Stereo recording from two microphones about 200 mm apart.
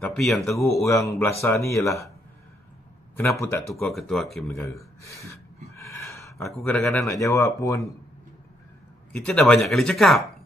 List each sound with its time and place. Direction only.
0.0 s speech: centre (ahead or behind)
0.6 s speech: 15° left (ahead or behind)
3.2 s speech: 15° left (ahead or behind)
3.8 s speech: centre (ahead or behind)
4.5 s gasp: 15° left (ahead or behind)
6.5 s speech: 5° left (ahead or behind)
9.1 s speech: 5° left (ahead or behind)